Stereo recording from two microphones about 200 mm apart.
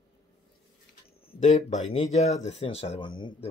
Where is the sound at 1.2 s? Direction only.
35° left (ahead or behind).